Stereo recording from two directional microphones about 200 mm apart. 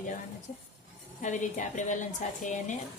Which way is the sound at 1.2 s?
40° left (ahead or behind).